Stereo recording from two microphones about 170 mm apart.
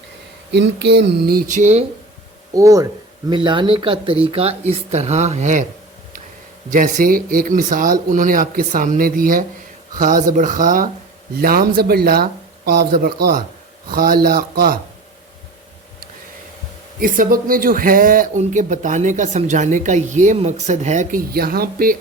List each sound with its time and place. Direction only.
0.5 s a sound: 85° right; by 1.5 s 65° right (ahead or behind)
1.5 s speech: 45° right (ahead or behind)
2.5 s speech: 20° right (ahead or behind); by 5.6 s 45° right (ahead or behind)
6.7 s speech: 50° right (ahead or behind)
17.0 s speech: 55° right (ahead or behind)
21.2 s speech: 65° right (ahead or behind)